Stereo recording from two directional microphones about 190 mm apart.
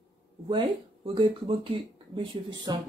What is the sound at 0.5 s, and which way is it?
Speech, 25° right (ahead or behind).